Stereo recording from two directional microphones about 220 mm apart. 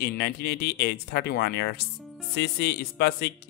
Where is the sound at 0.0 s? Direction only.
45° left (ahead or behind).